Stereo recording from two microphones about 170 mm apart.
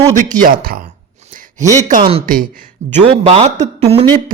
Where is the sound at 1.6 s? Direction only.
45° right (ahead or behind).